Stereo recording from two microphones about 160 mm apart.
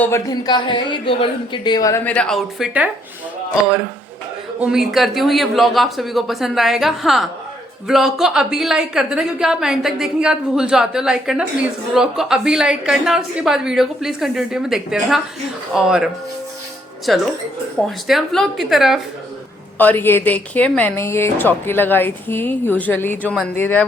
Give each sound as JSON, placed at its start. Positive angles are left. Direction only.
{"t": 0.0, "sound": "speech", "side_deg": 20}
{"t": 2.0, "sound": "a woman's voice", "side_deg": 5}
{"t": 4.6, "sound": "a woman's voice", "side_deg": 0}
{"t": 17.1, "sound": "a woman's voice", "side_deg": 0}
{"t": 19.8, "sound": "a woman's voice", "side_deg": 10}